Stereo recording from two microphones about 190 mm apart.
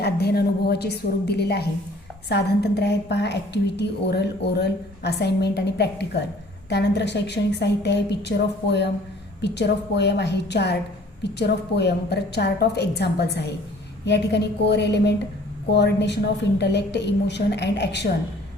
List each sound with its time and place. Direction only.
0.0 s a woman's voice: 60° left (ahead or behind)